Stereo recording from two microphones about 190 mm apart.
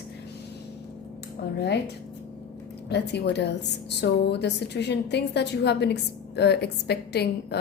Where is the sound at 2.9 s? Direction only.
60° left (ahead or behind).